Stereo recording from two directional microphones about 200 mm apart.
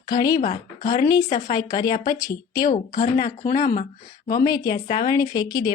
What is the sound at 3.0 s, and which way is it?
Speech, 20° left (ahead or behind).